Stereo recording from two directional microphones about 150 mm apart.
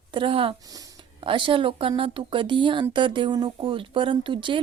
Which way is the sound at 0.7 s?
25° right (ahead or behind).